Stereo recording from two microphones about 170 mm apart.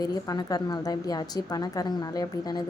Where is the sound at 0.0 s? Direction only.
25° left (ahead or behind).